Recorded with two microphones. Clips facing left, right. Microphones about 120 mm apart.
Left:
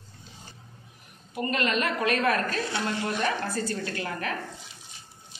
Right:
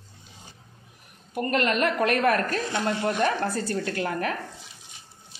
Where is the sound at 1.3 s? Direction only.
55° right (ahead or behind).